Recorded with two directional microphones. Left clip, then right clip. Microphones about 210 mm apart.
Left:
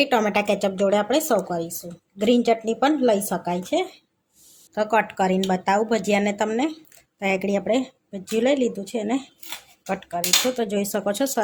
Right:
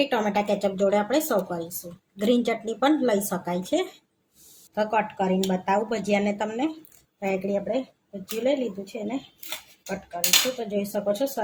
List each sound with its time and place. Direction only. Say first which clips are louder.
0.0 s speech: left 4 dB; 30° left (ahead or behind)
8.4 s speech: left 2 dB; 50° left (ahead or behind)